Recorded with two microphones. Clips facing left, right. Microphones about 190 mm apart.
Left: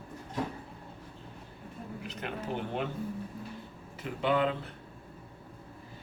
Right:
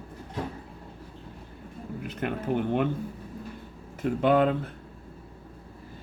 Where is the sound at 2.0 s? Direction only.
55° right (ahead or behind).